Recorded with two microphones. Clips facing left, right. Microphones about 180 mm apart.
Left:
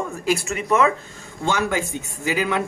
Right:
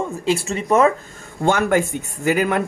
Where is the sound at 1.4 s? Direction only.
55° right (ahead or behind).